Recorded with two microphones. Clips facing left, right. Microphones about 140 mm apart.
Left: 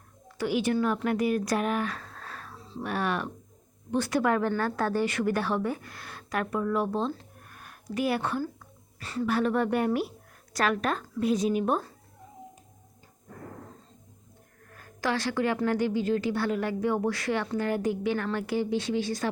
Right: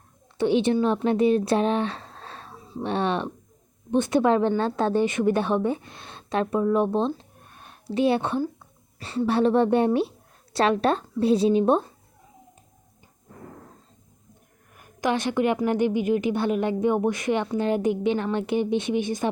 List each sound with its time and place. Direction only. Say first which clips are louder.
0.3 s a woman's voice: right 6 dB; 25° right (ahead or behind)
14.7 s a woman's voice: right 5 dB; 15° right (ahead or behind)